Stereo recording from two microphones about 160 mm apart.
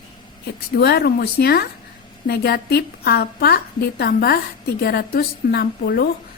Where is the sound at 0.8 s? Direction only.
75° left (ahead or behind).